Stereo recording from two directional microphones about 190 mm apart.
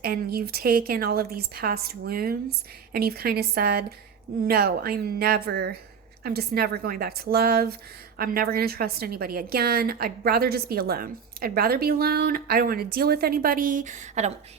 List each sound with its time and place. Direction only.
0.0 s a woman's voice: 55° right (ahead or behind); by 14.3 s 40° right (ahead or behind)